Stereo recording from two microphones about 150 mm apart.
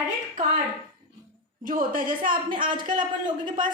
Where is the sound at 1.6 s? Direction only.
65° right (ahead or behind).